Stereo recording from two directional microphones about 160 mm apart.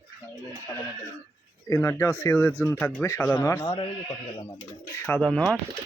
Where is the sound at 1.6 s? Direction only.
20° left (ahead or behind).